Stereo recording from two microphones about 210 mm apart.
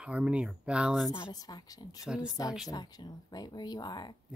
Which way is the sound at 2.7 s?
20° left (ahead or behind).